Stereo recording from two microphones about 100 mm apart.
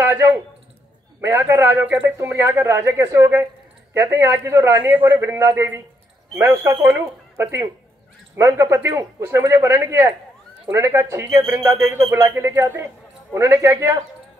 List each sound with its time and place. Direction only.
0.0 s speech: 20° right (ahead or behind)